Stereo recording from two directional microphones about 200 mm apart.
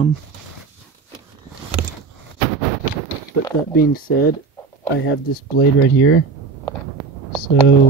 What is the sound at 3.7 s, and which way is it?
Speech, 50° left (ahead or behind).